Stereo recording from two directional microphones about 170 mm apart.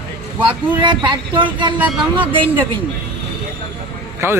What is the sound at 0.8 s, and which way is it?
Speech, 25° right (ahead or behind).